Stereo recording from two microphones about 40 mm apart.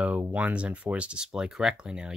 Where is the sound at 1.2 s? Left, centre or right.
Centre.